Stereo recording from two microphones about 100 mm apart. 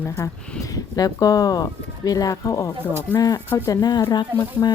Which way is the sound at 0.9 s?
35° left (ahead or behind).